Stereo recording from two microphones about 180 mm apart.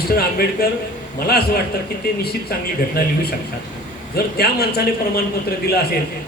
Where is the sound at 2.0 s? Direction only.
60° left (ahead or behind).